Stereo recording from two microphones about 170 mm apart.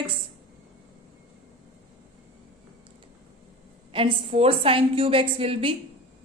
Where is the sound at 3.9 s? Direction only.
30° right (ahead or behind).